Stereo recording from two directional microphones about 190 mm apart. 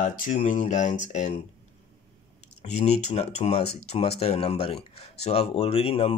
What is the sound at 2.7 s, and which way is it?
Speech, 35° left (ahead or behind).